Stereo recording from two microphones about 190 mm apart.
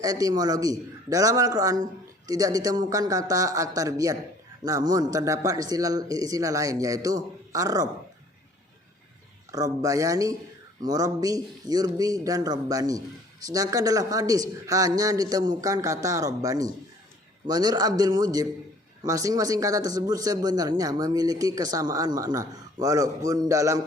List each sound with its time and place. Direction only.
0.0 s speech: 20° right (ahead or behind)
9.5 s a man's voice: 20° right (ahead or behind)